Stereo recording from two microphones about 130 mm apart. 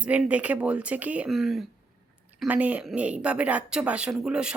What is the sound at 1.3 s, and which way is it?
Speech, centre (ahead or behind).